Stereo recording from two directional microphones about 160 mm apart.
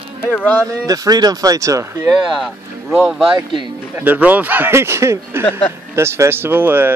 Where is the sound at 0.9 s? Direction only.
25° right (ahead or behind); by 3.3 s 5° right (ahead or behind).